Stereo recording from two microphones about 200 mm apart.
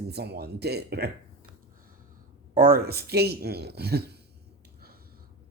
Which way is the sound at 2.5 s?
45° right (ahead or behind).